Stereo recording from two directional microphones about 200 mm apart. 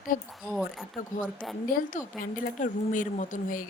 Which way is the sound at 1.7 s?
45° left (ahead or behind).